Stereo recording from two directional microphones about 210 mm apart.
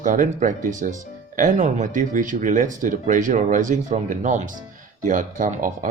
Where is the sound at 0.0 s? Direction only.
40° right (ahead or behind).